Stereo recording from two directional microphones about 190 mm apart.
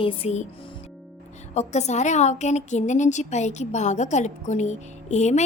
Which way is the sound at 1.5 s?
35° left (ahead or behind).